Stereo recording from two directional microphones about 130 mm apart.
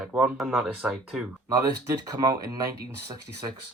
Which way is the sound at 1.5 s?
25° right (ahead or behind).